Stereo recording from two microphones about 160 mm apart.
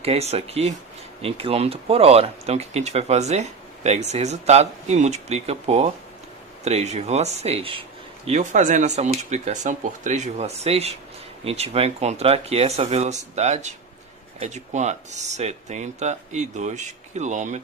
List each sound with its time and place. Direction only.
0.0 s speech: 40° right (ahead or behind)